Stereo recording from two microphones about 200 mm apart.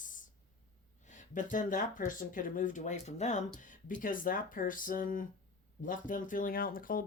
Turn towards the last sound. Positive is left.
turn(degrees=45)  # may be behind; listen again after turning